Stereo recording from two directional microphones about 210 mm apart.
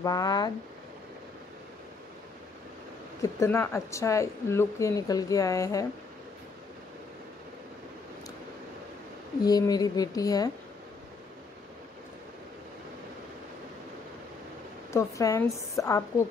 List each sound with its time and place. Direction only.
0.0 s a woman's voice: 20° left (ahead or behind)
3.2 s a woman's voice: 10° left (ahead or behind)
9.4 s a woman's voice: 20° left (ahead or behind)
14.9 s a woman's voice: 15° left (ahead or behind)